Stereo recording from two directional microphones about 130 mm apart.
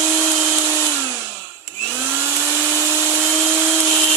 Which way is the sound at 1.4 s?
5° left (ahead or behind).